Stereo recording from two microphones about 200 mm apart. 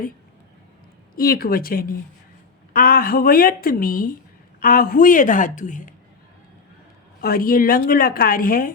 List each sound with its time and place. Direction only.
1.1 s a woman's voice: 50° left (ahead or behind)
7.2 s a woman's voice: 45° left (ahead or behind)